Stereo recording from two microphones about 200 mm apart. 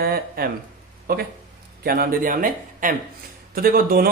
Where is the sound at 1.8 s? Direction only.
45° right (ahead or behind).